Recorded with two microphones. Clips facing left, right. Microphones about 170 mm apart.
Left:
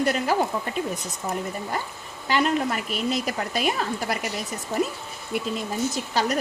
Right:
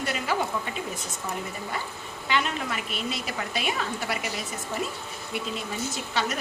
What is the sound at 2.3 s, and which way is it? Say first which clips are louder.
A woman's voice: left 6 dB; 40° left (ahead or behind).